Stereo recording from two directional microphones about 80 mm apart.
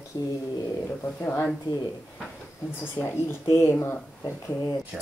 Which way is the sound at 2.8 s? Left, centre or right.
Left.